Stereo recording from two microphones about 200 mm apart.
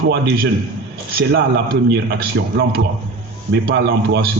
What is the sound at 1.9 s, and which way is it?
A man's voice, 55° right (ahead or behind).